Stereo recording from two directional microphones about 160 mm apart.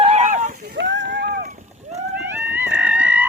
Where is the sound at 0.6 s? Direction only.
90° right; by 1.5 s 70° right (ahead or behind).